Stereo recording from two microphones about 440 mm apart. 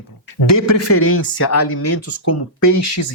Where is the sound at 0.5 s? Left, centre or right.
Left.